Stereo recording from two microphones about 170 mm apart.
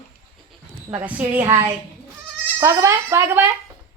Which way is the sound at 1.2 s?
10° right (ahead or behind).